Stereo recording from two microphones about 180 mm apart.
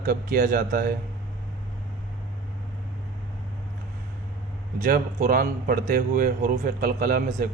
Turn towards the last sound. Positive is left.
turn(degrees=-55)  # may be behind; listen again after turning